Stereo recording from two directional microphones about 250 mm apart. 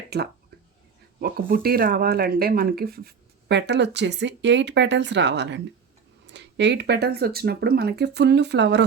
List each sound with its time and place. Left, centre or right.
0.1 s speech: right